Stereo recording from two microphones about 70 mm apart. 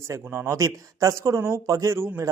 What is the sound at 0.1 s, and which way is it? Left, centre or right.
A man's voice, right.